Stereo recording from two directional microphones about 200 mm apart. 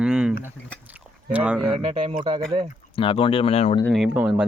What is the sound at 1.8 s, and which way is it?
Speech, 30° right (ahead or behind).